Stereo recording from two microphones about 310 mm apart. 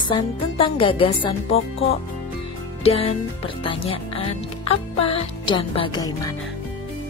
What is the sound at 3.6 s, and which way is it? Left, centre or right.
A woman's voice, centre.